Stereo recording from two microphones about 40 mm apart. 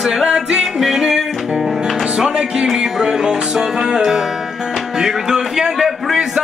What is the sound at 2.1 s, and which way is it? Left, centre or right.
Music, right.